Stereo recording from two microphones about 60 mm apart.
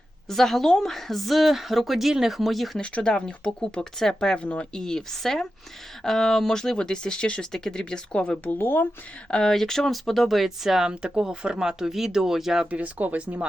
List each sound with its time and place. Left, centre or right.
0.3 s a woman's voice: centre
2.8 s speech: centre
4.8 s speech: centre
8.4 s speech: left
9.3 s speech: centre
12.7 s speech: right